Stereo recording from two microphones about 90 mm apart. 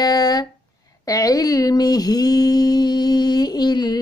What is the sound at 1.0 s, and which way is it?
Mantra, 40° left (ahead or behind).